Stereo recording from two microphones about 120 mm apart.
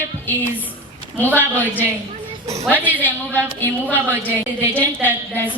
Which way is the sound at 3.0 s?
15° left (ahead or behind).